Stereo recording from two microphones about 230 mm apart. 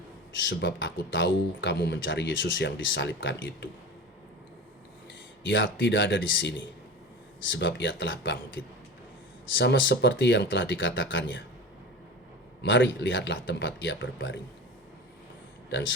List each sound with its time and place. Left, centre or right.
0.3 s a man's voice: left
5.5 s a man's voice: left
7.5 s a man's voice: left
12.6 s a man's voice: left